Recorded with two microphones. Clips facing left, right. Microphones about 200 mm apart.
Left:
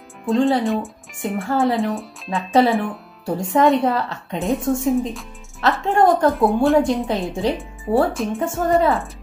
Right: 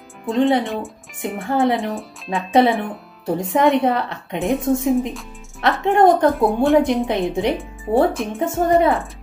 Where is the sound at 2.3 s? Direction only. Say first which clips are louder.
Right 1 dB; 15° right (ahead or behind).